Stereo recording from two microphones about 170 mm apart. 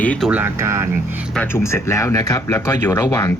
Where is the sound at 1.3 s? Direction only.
15° left (ahead or behind).